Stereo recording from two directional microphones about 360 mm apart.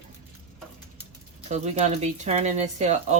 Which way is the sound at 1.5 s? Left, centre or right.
Centre.